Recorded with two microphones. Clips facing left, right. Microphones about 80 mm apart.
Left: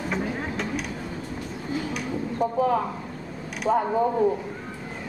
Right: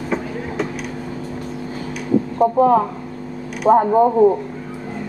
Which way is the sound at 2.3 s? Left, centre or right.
Right.